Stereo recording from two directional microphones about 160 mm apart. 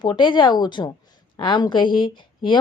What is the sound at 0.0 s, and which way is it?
A woman's voice, 30° left (ahead or behind).